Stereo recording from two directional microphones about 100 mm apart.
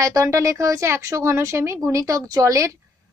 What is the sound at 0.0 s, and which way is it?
A woman's voice, 35° right (ahead or behind).